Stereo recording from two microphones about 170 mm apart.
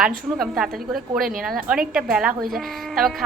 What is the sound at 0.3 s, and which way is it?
Speech, centre (ahead or behind).